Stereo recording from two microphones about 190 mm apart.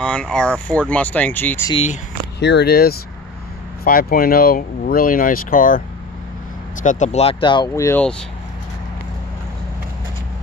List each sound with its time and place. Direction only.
0.0 s speech: 5° left (ahead or behind)
2.4 s speech: 60° left (ahead or behind)
6.8 s speech: 40° left (ahead or behind); by 8.0 s 15° left (ahead or behind)